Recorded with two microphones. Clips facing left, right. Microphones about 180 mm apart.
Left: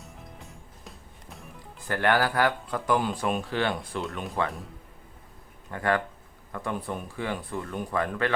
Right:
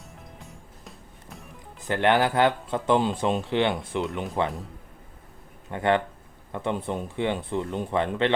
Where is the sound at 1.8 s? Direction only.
20° right (ahead or behind).